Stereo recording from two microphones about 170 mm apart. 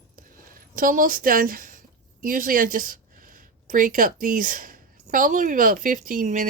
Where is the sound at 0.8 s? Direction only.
55° right (ahead or behind).